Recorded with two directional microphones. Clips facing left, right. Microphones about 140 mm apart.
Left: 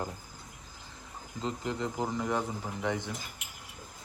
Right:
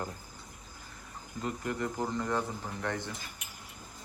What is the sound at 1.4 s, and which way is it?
Speech, 20° left (ahead or behind).